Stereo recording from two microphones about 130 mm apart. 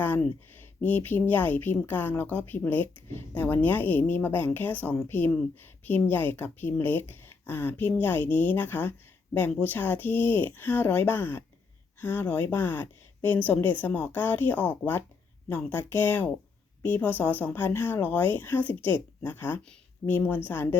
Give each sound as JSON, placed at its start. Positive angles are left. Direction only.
{"t": 0.0, "sound": "speech", "side_deg": 15}